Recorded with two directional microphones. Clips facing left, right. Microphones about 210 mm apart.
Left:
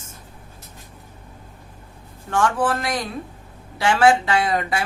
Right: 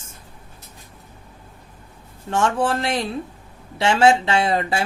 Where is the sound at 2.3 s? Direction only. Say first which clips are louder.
Even; 25° right (ahead or behind).